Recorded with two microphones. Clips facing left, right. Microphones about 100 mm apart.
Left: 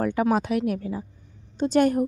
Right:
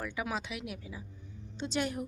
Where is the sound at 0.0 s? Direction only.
50° left (ahead or behind).